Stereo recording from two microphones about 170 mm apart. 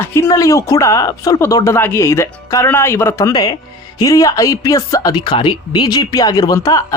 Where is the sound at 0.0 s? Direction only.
15° left (ahead or behind).